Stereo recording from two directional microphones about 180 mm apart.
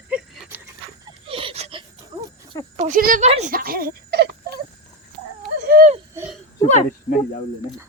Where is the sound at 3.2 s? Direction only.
35° right (ahead or behind).